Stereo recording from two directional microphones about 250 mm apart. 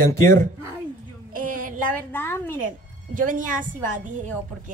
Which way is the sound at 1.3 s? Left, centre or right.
Right.